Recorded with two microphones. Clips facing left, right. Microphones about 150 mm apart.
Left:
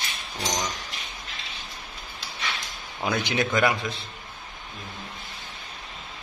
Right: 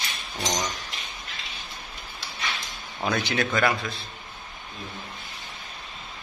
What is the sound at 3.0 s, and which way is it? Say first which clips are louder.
Speech: even; 15° left (ahead or behind).